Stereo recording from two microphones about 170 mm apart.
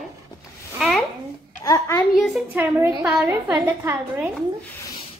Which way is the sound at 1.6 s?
15° left (ahead or behind).